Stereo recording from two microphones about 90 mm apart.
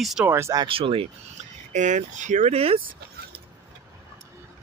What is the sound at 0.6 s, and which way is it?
Speech, 85° right.